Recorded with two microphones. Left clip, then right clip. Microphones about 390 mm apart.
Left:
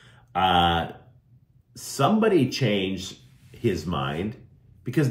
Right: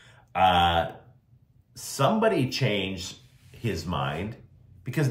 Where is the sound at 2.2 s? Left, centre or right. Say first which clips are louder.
Left 3 dB; right.